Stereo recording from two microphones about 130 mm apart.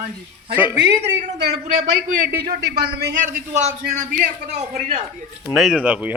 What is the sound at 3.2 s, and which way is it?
A man's voice, 90° right.